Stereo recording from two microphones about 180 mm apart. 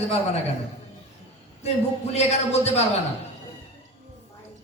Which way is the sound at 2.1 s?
35° left (ahead or behind).